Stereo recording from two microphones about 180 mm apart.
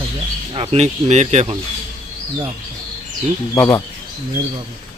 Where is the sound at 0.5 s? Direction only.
35° right (ahead or behind).